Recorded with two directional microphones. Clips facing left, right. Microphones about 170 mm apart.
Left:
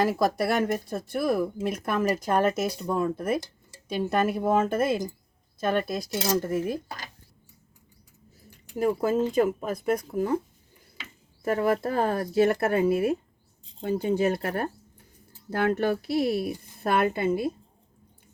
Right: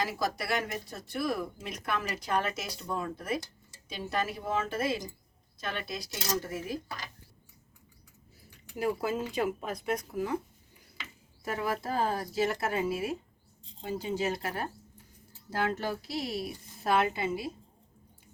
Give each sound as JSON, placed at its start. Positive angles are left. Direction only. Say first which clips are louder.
{"t": 0.0, "sound": "speech", "louder": "left 9 dB", "side_deg": 55}
{"t": 8.8, "sound": "speech", "louder": "left 7 dB", "side_deg": 45}
{"t": 11.4, "sound": "speech", "louder": "left 8 dB", "side_deg": 55}